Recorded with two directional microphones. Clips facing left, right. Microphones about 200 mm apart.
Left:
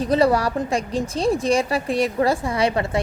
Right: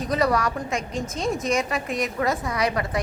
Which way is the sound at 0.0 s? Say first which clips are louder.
Left 5 dB; 30° left (ahead or behind).